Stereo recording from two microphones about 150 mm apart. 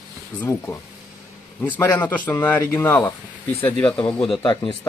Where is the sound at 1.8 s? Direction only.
15° left (ahead or behind).